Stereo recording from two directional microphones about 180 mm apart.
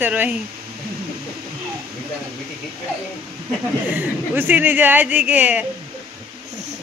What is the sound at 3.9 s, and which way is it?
Speech, 10° right (ahead or behind).